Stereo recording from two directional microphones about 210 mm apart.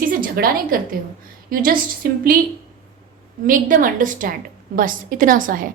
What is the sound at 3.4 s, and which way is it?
A woman's voice, 40° right (ahead or behind).